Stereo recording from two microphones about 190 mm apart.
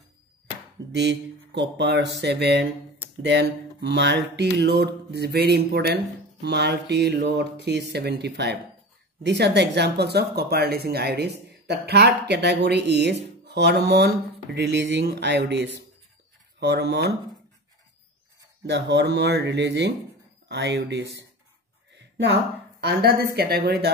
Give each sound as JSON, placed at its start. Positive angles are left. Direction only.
{"t": 0.9, "sound": "speech", "side_deg": -65}
{"t": 18.7, "sound": "speech", "side_deg": -65}
{"t": 21.9, "sound": "a sound", "side_deg": -65}
{"t": 22.8, "sound": "speech", "side_deg": -55}